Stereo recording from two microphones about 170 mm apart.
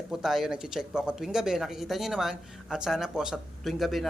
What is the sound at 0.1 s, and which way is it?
Speech, centre (ahead or behind).